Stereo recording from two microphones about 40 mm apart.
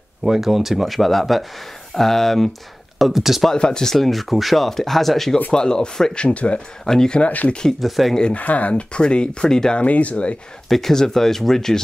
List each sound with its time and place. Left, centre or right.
0.2 s speech: centre
3.0 s speech: centre
3.5 s speech: centre
3.9 s speech: centre
5.5 s speech: centre
6.2 s speech: left
7.8 s speech: centre
8.3 s speech: left; by 9.8 s centre
9.8 s speech: left
10.7 s speech: centre